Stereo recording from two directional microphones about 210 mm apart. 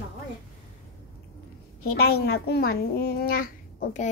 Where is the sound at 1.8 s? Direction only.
50° left (ahead or behind).